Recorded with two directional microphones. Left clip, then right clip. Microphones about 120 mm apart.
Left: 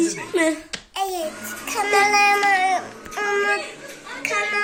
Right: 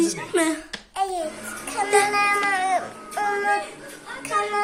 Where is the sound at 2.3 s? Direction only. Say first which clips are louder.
Left 3 dB; 15° right (ahead or behind).